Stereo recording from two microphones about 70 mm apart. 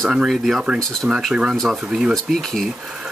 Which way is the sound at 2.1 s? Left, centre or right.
Centre.